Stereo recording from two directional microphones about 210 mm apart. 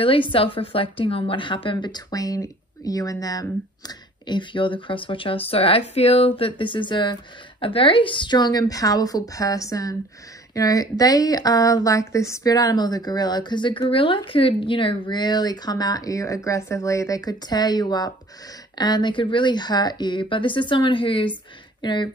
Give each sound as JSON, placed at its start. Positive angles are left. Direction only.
{"t": 0.3, "sound": "a woman's voice", "side_deg": 25}